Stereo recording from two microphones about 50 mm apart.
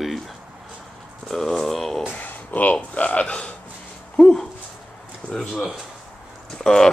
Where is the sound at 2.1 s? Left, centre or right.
Left.